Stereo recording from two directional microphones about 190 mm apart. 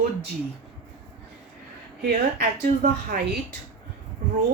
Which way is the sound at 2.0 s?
55° right (ahead or behind).